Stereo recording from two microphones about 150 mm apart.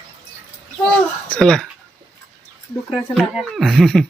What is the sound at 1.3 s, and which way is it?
Speech, 5° left (ahead or behind).